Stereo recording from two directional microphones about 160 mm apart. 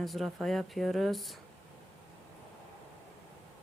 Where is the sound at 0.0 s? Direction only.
Centre (ahead or behind).